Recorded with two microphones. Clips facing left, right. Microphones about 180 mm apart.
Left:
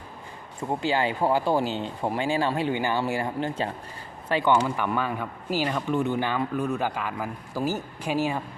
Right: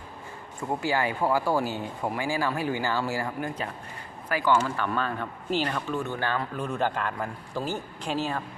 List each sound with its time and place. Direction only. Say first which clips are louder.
0.7 s speech: left 2 dB; 20° left (ahead or behind)